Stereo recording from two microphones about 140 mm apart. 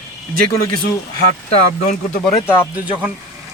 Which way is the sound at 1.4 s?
55° left (ahead or behind).